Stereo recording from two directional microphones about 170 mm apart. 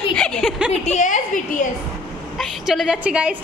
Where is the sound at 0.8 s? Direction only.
45° left (ahead or behind).